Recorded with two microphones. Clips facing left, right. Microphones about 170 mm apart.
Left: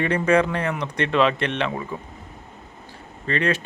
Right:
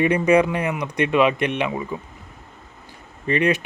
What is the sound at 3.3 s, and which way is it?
Speech, 15° right (ahead or behind).